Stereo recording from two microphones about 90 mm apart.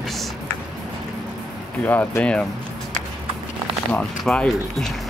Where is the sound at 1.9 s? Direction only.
20° left (ahead or behind).